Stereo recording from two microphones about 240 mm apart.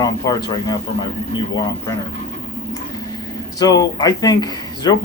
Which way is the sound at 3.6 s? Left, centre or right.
Centre.